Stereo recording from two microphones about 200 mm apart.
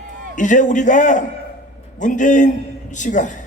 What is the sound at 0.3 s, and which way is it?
A man's voice, 40° left (ahead or behind).